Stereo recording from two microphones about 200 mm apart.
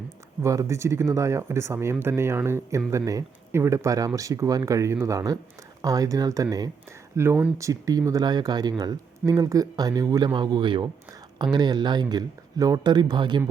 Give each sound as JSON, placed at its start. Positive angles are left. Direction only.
{"t": 0.4, "sound": "speech", "side_deg": -15}